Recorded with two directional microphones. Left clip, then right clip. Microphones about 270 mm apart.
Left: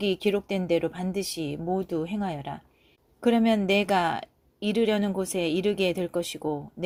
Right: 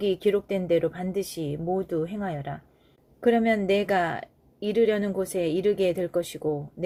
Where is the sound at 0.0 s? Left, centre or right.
Left.